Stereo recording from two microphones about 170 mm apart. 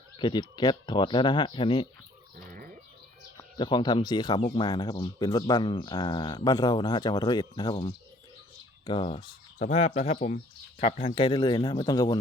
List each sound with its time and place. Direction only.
0.2 s speech: 25° left (ahead or behind)
2.3 s chicken: 55° right (ahead or behind)
3.3 s speech: 25° left (ahead or behind)